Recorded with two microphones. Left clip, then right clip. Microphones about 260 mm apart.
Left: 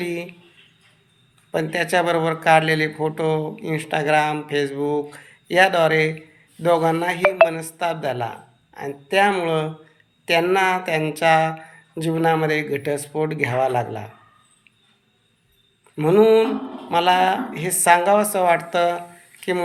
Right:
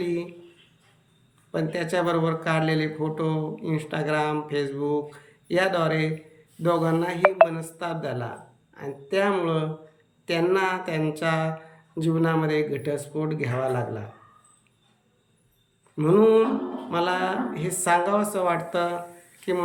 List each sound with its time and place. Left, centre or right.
0.0 s a man's voice: centre
1.5 s a man's voice: centre
16.0 s a man's voice: centre